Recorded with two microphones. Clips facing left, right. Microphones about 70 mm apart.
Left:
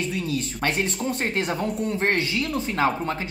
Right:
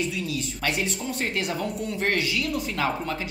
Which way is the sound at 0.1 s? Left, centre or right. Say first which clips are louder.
Left 3 dB; left.